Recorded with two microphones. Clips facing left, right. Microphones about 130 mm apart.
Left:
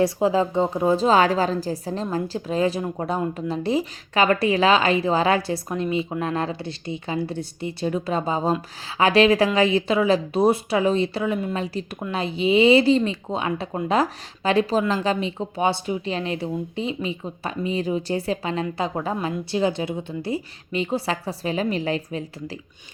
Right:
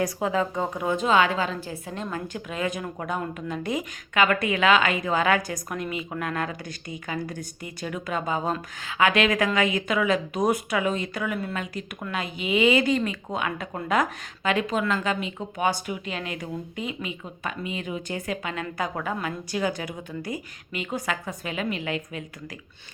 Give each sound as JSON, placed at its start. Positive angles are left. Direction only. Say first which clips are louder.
{"t": 0.0, "sound": "a woman's voice", "louder": "left 5 dB", "side_deg": 30}